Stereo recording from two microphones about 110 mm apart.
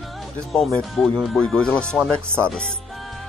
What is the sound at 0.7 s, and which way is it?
Speech, 5° left (ahead or behind).